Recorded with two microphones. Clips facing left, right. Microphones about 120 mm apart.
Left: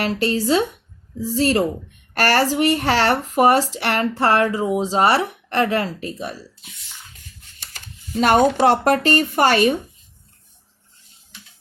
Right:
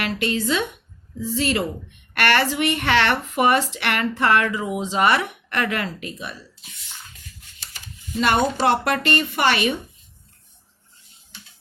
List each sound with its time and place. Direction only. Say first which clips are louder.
0.0 s speech: left 3 dB; 35° left (ahead or behind)
7.7 s a sound: left 2 dB; 40° left (ahead or behind)
8.4 s speech: left 5 dB; 50° left (ahead or behind)